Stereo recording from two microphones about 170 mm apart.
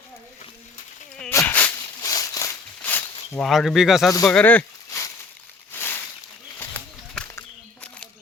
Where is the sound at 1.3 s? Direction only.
15° left (ahead or behind).